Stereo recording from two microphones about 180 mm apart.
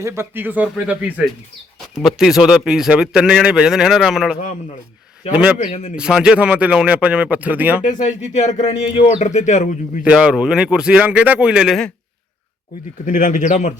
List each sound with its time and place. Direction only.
0.0 s a man's voice: 15° right (ahead or behind)
5.5 s speech: 40° left (ahead or behind)
6.0 s speech: 5° right (ahead or behind)
7.9 s speech: 45° left (ahead or behind)
10.0 s a man's voice: 5° right (ahead or behind)
13.1 s speech: 45° left (ahead or behind)